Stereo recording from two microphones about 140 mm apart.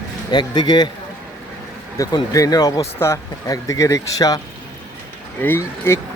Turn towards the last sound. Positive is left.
turn(degrees=15)  # may be behind; listen again after turning